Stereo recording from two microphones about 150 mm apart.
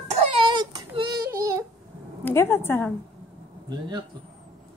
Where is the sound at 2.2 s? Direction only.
15° left (ahead or behind).